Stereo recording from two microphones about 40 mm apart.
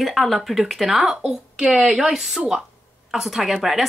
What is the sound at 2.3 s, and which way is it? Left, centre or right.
Speech, centre.